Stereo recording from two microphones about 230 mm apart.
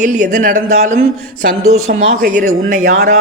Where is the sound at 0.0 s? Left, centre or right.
Right.